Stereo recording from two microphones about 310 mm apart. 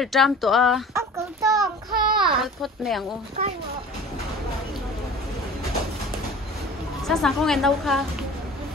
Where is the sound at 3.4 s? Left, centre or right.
Right.